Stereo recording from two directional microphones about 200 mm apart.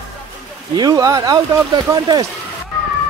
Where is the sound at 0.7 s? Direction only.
20° right (ahead or behind).